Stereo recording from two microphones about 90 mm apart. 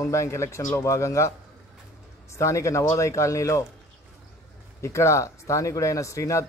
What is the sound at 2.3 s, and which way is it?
A man's voice, 35° left (ahead or behind).